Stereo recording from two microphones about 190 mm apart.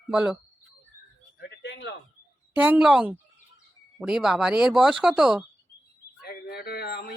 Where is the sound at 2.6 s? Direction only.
5° right (ahead or behind).